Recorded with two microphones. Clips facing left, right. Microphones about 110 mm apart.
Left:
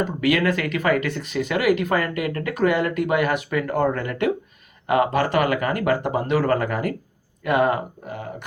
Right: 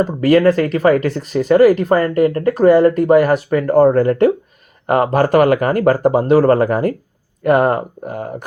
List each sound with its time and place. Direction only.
0.0 s speech: 35° right (ahead or behind)